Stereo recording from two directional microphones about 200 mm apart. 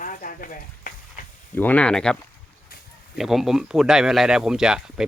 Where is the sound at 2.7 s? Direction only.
50° left (ahead or behind).